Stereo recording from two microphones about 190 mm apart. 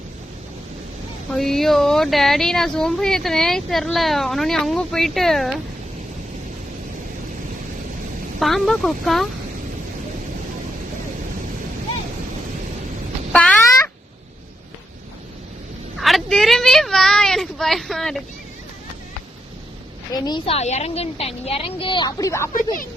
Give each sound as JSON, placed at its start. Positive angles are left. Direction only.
{"t": 1.3, "sound": "speech", "side_deg": 0}
{"t": 8.4, "sound": "speech", "side_deg": 0}
{"t": 13.3, "sound": "a sound", "side_deg": 5}
{"t": 16.0, "sound": "speech", "side_deg": 0}
{"t": 20.1, "sound": "a woman's voice", "side_deg": 20}